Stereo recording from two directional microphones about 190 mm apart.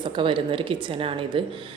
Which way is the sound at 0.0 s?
25° right (ahead or behind).